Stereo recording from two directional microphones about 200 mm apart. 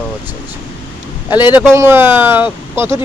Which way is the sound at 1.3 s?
20° left (ahead or behind).